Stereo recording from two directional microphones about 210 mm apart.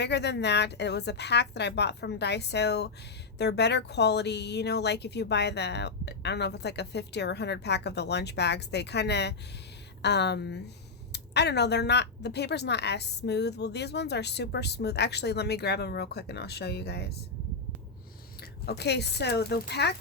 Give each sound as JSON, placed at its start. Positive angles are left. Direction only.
{"t": 0.0, "sound": "a woman's voice", "side_deg": 55}
{"t": 18.3, "sound": "speech", "side_deg": 50}